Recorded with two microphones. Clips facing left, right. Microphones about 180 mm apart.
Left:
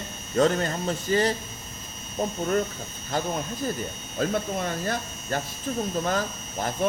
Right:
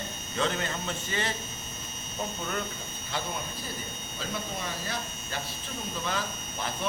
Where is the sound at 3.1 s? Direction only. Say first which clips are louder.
Left 7 dB; 45° left (ahead or behind).